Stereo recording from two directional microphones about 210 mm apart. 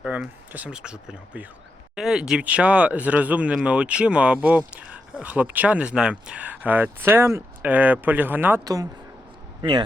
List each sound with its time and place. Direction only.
0.0 s speech: 5° right (ahead or behind); by 9.8 s 20° right (ahead or behind)